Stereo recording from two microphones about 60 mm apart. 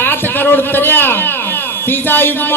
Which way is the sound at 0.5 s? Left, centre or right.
Left.